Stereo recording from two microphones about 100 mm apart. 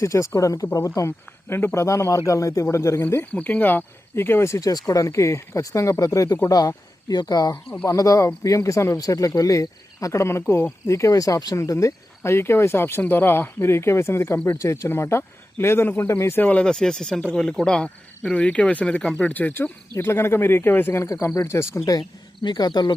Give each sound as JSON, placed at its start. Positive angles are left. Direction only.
{"t": 0.0, "sound": "speech", "side_deg": 30}
{"t": 7.5, "sound": "speech", "side_deg": 15}
{"t": 7.9, "sound": "speech", "side_deg": 35}
{"t": 22.4, "sound": "speech", "side_deg": 45}